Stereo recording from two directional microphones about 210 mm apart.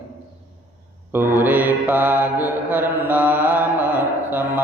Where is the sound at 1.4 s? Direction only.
10° right (ahead or behind).